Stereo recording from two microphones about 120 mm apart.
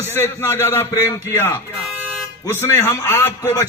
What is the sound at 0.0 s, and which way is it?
A man's voice, 20° left (ahead or behind).